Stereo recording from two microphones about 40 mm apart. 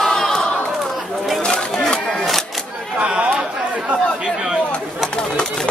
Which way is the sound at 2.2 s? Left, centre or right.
Centre.